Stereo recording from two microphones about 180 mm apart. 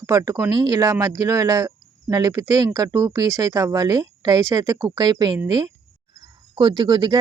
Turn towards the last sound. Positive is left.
turn(degrees=-25)  # may be behind; listen again after turning